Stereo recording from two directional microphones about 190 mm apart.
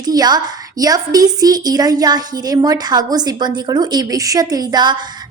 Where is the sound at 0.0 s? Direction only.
20° right (ahead or behind).